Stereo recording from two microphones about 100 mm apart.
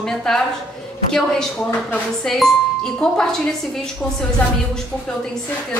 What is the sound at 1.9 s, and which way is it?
Speech, 5° left (ahead or behind).